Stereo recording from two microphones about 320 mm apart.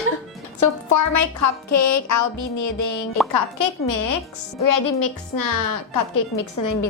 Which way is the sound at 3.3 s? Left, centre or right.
Left.